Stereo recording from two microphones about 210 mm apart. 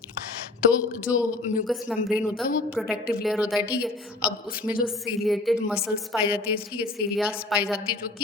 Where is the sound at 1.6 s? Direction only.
Centre (ahead or behind).